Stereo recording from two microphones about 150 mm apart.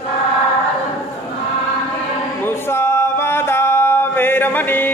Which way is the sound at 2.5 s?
15° left (ahead or behind).